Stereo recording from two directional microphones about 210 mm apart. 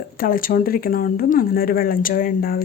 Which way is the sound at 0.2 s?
40° left (ahead or behind).